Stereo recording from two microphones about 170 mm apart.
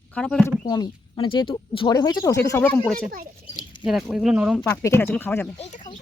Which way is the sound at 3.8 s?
Centre (ahead or behind).